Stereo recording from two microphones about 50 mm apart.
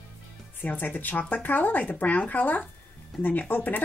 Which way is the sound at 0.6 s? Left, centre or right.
Left.